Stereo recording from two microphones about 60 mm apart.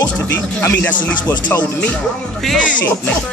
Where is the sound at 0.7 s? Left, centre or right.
Left.